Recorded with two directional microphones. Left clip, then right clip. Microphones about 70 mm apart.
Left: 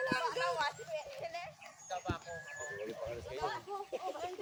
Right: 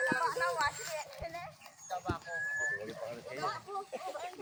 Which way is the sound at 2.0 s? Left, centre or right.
Centre.